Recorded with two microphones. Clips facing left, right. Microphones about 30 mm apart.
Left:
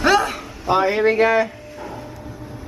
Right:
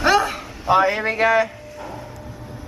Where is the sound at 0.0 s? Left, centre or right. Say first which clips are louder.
Left 1 dB; centre.